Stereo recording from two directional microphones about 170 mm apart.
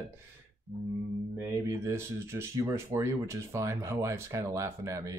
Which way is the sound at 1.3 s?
20° right (ahead or behind).